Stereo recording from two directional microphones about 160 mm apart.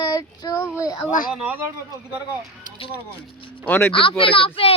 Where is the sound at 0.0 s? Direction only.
25° left (ahead or behind).